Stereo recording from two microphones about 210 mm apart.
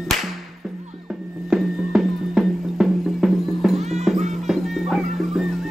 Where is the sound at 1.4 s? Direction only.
5° right (ahead or behind).